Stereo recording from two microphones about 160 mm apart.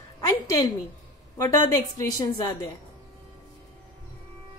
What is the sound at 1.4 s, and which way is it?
Speech, 20° left (ahead or behind).